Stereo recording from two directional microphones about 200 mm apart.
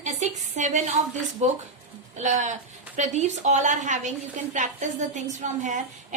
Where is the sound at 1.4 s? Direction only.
35° right (ahead or behind).